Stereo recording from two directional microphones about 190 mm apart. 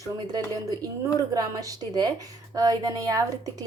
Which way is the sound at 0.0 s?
20° right (ahead or behind).